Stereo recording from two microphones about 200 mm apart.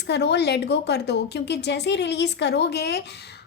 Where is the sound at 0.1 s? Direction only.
55° left (ahead or behind).